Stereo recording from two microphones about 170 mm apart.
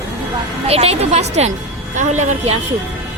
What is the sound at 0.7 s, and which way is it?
A woman's voice, 35° right (ahead or behind).